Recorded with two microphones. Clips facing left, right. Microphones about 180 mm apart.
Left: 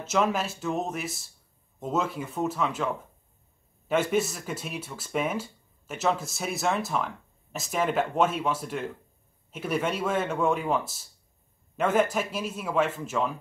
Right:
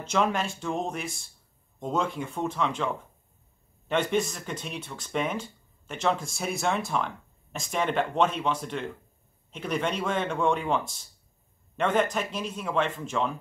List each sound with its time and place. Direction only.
0.0 s speech: 5° left (ahead or behind)